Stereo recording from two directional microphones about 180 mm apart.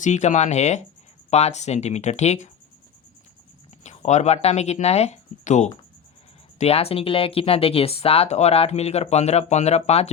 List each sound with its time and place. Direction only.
0.0 s speech: 40° left (ahead or behind)
3.8 s speech: 40° left (ahead or behind)